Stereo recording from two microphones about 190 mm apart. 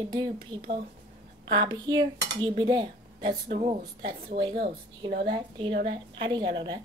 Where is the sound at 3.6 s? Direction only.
35° right (ahead or behind).